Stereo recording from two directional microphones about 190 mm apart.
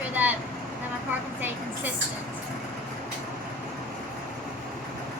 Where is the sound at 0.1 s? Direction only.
10° right (ahead or behind).